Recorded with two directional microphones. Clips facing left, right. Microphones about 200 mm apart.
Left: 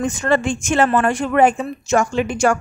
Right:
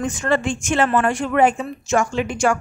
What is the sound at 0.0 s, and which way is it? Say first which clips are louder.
A woman's voice: left 2 dB; 40° left (ahead or behind).